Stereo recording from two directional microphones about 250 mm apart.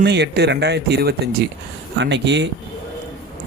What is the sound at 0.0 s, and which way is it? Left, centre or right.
Speech, right.